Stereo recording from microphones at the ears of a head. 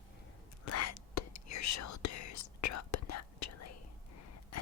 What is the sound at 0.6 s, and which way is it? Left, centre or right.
Whispering, left.